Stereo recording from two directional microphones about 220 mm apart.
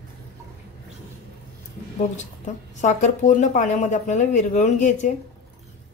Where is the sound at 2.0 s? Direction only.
35° left (ahead or behind).